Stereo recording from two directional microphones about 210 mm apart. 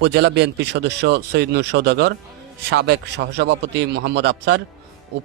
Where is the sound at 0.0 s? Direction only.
55° right (ahead or behind).